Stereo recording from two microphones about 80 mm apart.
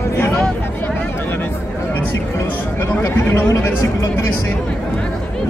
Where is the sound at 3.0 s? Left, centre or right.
Left.